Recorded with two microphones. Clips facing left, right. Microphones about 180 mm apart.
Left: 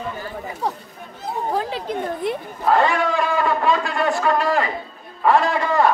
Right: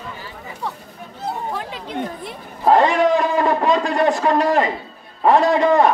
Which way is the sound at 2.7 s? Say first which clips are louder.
Right 4 dB; 20° right (ahead or behind).